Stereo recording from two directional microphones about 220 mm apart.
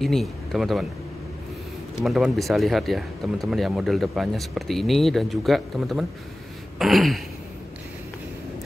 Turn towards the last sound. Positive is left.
turn(degrees=0)  # may be behind; listen again after turning